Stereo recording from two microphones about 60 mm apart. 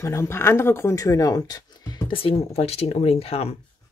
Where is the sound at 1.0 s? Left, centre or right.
Left.